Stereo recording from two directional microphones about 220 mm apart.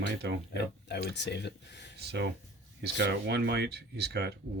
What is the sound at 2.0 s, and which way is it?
Speech, 50° right (ahead or behind).